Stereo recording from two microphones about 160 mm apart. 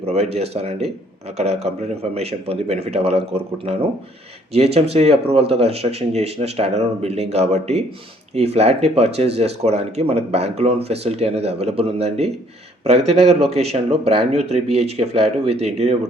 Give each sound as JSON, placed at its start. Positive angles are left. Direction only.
{"t": 0.0, "sound": "speech", "side_deg": -40}